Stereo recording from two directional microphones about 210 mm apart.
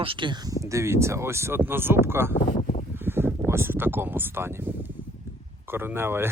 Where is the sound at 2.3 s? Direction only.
30° left (ahead or behind).